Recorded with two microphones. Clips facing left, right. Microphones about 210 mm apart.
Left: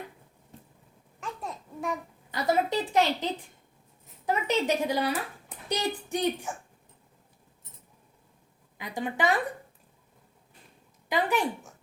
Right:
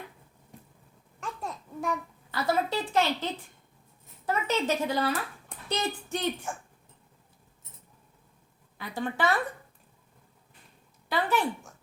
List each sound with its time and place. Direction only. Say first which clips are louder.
1.2 s babbling: even; centre (ahead or behind)
2.3 s a woman's voice: left 2 dB; 20° left (ahead or behind)
4.3 s a woman's voice: left 2 dB; 15° left (ahead or behind)
8.8 s a woman's voice: even; 15° left (ahead or behind)
11.1 s a sound: left 1 dB; 15° left (ahead or behind)